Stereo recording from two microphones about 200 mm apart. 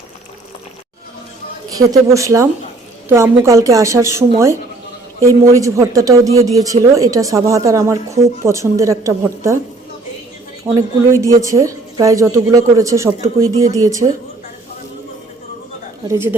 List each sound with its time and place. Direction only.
1.8 s speech: 15° right (ahead or behind)
10.8 s speech: 15° right (ahead or behind)
16.0 s speech: 10° right (ahead or behind)